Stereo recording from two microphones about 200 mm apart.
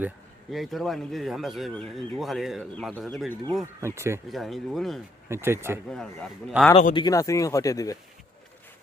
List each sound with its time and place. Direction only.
0.5 s speech: centre (ahead or behind)
3.8 s speech: 15° right (ahead or behind)
4.3 s speech: centre (ahead or behind)
5.3 s speech: 10° right (ahead or behind)
5.9 s speech: 5° left (ahead or behind)
6.9 s speech: 20° left (ahead or behind)